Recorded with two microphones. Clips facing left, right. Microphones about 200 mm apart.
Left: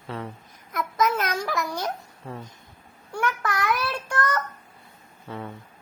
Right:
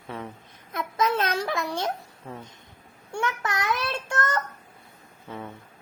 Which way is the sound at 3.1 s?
25° right (ahead or behind).